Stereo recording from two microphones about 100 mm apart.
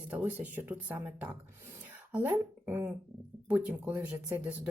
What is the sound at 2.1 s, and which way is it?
Speech, 20° right (ahead or behind).